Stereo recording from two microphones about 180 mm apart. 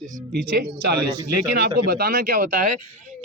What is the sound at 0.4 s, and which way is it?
Speech, 65° right (ahead or behind).